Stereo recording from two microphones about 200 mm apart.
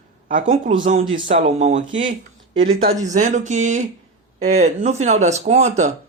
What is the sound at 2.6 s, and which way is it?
Speech, 85° right.